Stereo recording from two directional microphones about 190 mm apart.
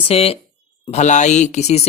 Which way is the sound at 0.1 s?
30° left (ahead or behind).